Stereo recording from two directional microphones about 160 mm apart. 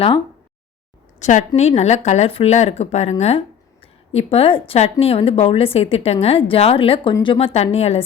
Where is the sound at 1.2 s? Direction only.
50° left (ahead or behind).